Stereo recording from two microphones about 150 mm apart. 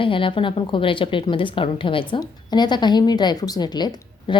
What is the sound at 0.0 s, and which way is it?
A woman's voice, 35° left (ahead or behind).